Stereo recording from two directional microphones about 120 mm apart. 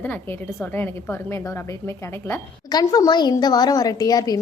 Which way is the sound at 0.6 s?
15° left (ahead or behind).